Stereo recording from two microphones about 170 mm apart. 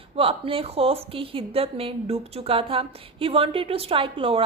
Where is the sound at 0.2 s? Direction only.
35° right (ahead or behind).